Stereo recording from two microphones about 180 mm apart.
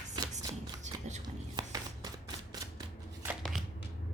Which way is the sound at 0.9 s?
40° right (ahead or behind).